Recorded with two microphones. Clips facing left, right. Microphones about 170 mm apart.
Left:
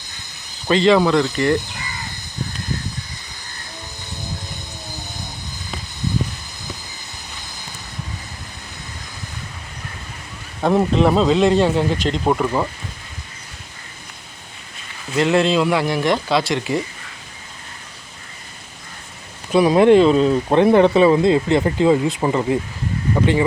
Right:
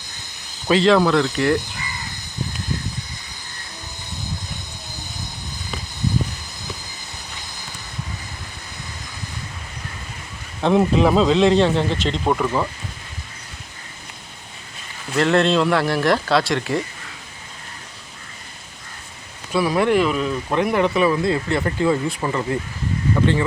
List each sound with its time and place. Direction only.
0.7 s speech: centre (ahead or behind)
10.6 s speech: centre (ahead or behind)
15.1 s speech: 5° left (ahead or behind)
19.5 s speech: 20° left (ahead or behind)